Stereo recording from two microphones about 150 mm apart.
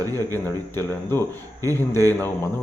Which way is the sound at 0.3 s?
15° left (ahead or behind).